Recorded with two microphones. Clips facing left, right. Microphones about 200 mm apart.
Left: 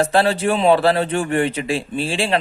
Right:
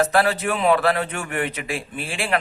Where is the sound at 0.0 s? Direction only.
30° left (ahead or behind).